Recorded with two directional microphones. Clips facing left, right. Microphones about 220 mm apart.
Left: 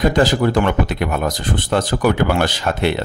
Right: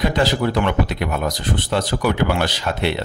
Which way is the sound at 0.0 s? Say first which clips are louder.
Left 4 dB; 45° left (ahead or behind).